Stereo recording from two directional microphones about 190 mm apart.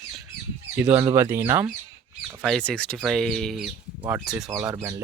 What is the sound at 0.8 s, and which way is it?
Speech, 5° right (ahead or behind).